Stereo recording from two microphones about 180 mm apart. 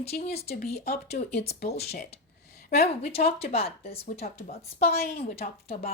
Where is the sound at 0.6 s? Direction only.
60° left (ahead or behind).